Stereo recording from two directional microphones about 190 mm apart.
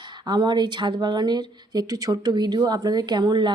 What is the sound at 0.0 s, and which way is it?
Speech, 20° right (ahead or behind).